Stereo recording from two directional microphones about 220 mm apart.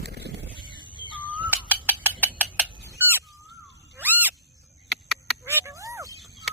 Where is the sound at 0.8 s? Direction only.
20° left (ahead or behind).